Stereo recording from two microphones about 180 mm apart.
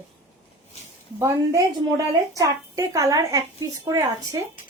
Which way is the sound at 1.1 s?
15° right (ahead or behind).